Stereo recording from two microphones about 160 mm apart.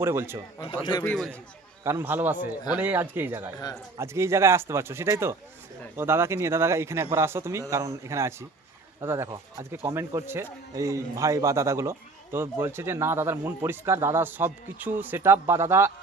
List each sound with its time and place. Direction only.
0.0 s a man's voice: 15° right (ahead or behind)
1.0 s a man's voice: 5° left (ahead or behind)
1.8 s a man's voice: 15° right (ahead or behind)